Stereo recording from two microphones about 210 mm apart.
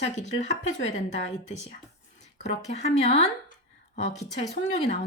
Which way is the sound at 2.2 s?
30° left (ahead or behind).